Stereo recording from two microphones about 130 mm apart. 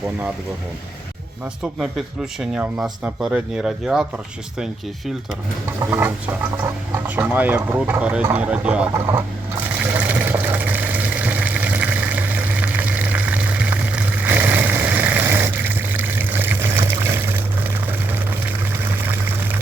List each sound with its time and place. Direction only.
2.4 s speech: 5° right (ahead or behind)
5.8 s speech: 20° right (ahead or behind)
8.9 s speech: 25° right (ahead or behind)
9.8 s water: 15° right (ahead or behind)